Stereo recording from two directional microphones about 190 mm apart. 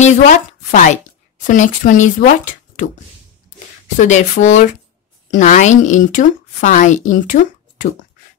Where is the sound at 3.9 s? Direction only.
40° left (ahead or behind).